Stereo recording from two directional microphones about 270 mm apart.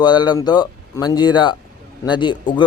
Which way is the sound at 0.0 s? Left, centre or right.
Centre.